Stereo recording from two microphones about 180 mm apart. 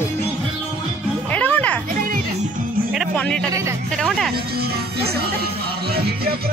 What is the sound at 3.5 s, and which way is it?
Speech, 15° right (ahead or behind).